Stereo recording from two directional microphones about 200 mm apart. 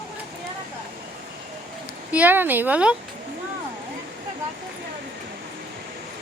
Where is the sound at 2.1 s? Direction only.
10° right (ahead or behind).